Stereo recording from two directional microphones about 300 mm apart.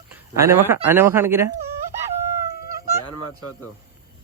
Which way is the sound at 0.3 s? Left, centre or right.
Centre.